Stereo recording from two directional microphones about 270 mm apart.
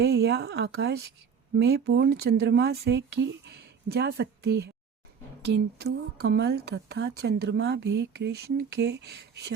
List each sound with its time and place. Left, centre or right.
0.0 s a woman's voice: right